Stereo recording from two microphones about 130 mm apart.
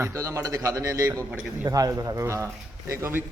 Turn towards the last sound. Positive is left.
turn(degrees=-20)  # may be behind; listen again after turning